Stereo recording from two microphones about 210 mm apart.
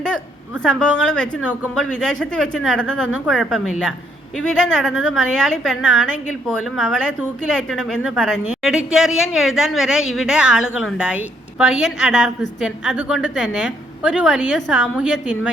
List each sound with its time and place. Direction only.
0.6 s a woman's voice: 5° left (ahead or behind)